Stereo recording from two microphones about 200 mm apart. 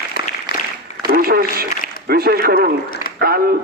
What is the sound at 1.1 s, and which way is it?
A man's voice, 45° right (ahead or behind).